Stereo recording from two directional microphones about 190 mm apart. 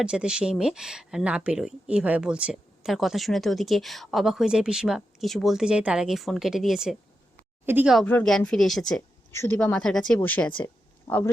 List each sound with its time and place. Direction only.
0.0 s speech: 5° right (ahead or behind)
7.9 s speech: 5° left (ahead or behind)
9.3 s a woman's voice: 15° left (ahead or behind)